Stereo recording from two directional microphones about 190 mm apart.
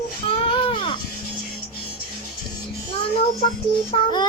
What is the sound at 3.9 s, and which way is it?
Speech, 25° left (ahead or behind).